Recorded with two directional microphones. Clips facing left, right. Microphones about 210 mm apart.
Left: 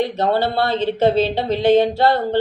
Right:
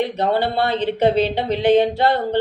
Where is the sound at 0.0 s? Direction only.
20° right (ahead or behind).